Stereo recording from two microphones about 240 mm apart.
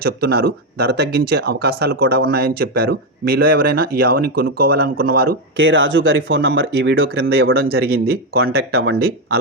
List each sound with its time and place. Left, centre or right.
0.0 s speech: right
7.3 s speech: right